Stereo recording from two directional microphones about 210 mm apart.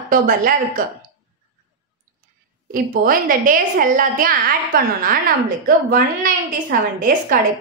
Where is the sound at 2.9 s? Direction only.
40° right (ahead or behind).